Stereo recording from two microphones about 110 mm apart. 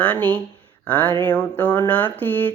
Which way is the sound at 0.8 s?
15° left (ahead or behind).